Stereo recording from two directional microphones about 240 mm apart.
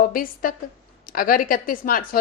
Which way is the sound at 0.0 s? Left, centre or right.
Left.